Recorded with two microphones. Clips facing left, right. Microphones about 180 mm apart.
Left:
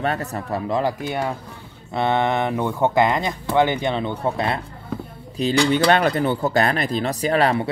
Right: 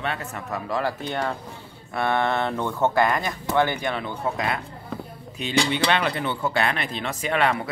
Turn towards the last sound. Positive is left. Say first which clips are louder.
# left 4 dB
turn(degrees=35)  # may be behind; listen again after turning